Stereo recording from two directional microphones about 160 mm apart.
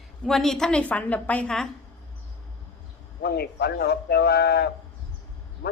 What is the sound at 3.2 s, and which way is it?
Speech, 80° left.